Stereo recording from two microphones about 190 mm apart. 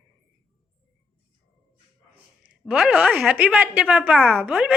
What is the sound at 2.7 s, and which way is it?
A woman's voice, 5° right (ahead or behind).